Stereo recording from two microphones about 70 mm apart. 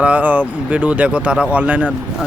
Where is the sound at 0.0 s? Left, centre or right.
Right.